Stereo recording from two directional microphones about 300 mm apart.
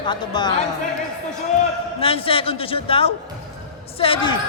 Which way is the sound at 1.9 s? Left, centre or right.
Centre.